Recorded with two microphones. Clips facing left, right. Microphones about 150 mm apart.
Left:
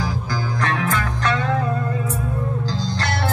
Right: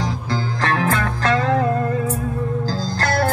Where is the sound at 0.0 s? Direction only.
30° right (ahead or behind).